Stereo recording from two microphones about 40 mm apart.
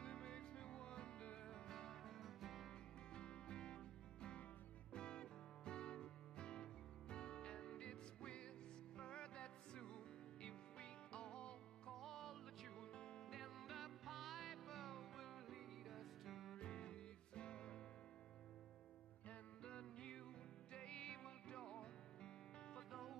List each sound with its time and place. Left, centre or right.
0.0 s music: left
1.7 s music: centre
3.1 s music: left
11.9 s music: centre
12.7 s music: left
13.3 s music: centre
16.5 s music: left
19.6 s music: left
22.8 s music: centre